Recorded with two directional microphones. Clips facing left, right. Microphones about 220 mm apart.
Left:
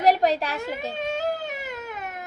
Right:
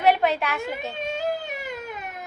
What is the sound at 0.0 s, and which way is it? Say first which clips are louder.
Speech: even; 35° left (ahead or behind).